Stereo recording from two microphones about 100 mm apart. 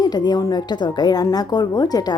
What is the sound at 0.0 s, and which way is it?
A woman's voice, 40° left (ahead or behind).